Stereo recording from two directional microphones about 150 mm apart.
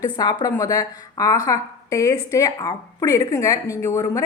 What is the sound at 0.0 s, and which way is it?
A woman's voice, 25° left (ahead or behind).